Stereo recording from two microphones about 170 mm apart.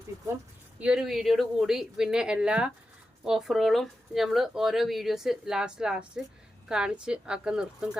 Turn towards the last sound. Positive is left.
turn(degrees=-5)  # may be behind; listen again after turning